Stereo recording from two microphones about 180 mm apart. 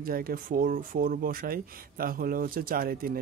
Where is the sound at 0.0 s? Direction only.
55° right (ahead or behind).